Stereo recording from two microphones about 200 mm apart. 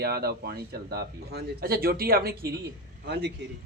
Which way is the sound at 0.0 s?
50° right (ahead or behind).